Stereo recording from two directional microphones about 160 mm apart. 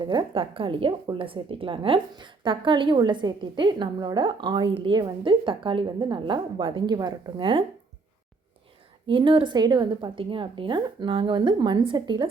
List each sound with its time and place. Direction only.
0.0 s a woman's voice: 30° right (ahead or behind)
9.0 s a woman's voice: 30° right (ahead or behind)